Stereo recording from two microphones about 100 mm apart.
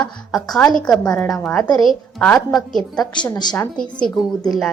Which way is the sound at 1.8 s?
Centre (ahead or behind).